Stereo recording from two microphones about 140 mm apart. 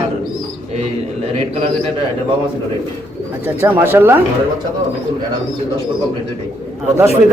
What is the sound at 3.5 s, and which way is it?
Speech, 15° right (ahead or behind).